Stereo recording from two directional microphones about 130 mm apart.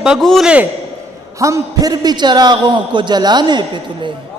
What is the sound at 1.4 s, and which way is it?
A man's voice, 25° right (ahead or behind).